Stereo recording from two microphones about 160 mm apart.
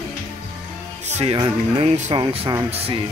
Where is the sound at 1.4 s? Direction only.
30° right (ahead or behind).